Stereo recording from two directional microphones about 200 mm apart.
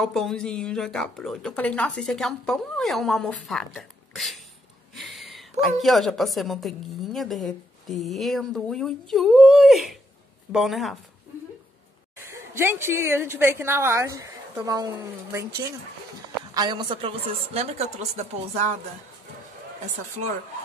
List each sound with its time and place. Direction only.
0.0 s a woman's voice: 5° left (ahead or behind)
12.3 s a woman's voice: 10° right (ahead or behind)
16.5 s a woman's voice: 20° right (ahead or behind)